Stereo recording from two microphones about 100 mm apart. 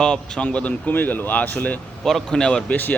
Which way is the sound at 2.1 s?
5° left (ahead or behind).